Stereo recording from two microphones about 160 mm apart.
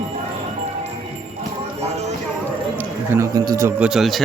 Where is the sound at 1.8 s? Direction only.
40° right (ahead or behind).